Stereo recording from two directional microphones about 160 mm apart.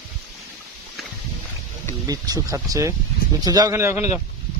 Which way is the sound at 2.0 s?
20° right (ahead or behind).